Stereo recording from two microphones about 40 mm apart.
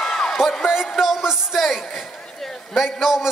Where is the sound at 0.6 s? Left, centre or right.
Centre.